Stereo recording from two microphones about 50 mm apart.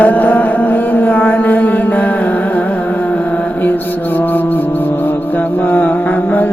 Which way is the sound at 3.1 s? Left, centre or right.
Left.